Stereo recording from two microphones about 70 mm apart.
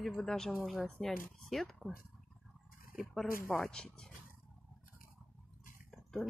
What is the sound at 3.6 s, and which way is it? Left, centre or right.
Speech, centre.